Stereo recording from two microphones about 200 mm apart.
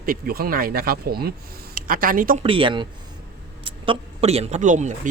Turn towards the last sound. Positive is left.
turn(degrees=-40)  # may be behind; listen again after turning